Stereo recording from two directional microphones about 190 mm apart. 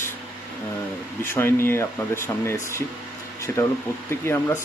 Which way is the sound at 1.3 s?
10° left (ahead or behind).